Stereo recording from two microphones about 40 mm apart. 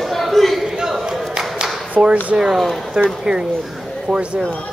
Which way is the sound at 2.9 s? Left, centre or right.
Centre.